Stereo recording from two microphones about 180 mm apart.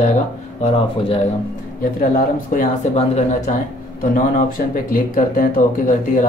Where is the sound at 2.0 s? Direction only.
50° left (ahead or behind).